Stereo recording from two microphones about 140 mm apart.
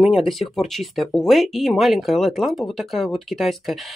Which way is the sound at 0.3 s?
Centre (ahead or behind).